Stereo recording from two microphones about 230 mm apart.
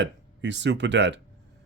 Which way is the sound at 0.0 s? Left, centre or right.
Right.